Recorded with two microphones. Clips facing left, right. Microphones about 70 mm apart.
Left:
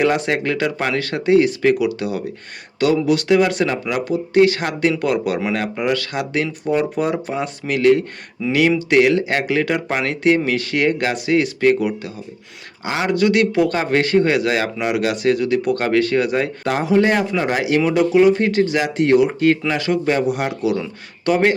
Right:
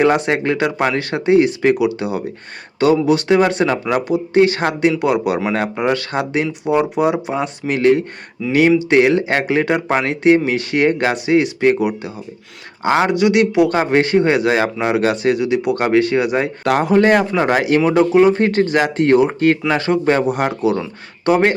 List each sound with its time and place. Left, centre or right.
0.0 s speech: right
4.9 s speech: centre
6.4 s speech: centre
12.8 s speech: right
13.1 s speech: centre
16.6 s speech: right